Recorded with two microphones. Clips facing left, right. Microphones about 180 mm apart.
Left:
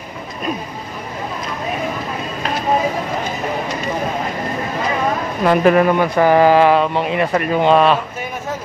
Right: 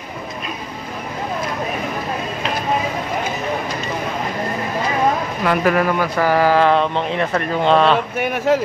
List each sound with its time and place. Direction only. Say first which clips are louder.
5.4 s speech: left 5 dB; 25° left (ahead or behind); by 8.0 s 5° left (ahead or behind)
8.2 s speech: right 8 dB; 70° right (ahead or behind)